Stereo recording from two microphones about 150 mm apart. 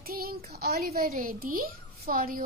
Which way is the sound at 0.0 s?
85° right.